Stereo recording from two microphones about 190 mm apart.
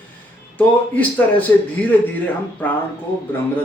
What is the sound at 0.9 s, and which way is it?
A man's voice, 10° left (ahead or behind).